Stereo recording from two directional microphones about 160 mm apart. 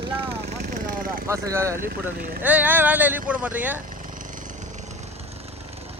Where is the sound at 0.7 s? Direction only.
55° right (ahead or behind).